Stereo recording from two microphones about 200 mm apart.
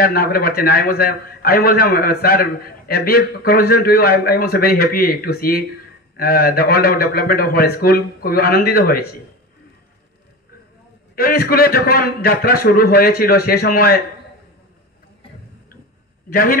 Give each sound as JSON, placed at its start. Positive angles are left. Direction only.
{"t": 0.0, "sound": "a man's voice", "side_deg": 50}
{"t": 11.1, "sound": "a man's voice", "side_deg": 50}
{"t": 16.3, "sound": "a man's voice", "side_deg": 45}